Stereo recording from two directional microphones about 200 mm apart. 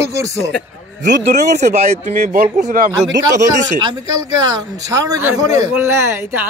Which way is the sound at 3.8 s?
20° right (ahead or behind).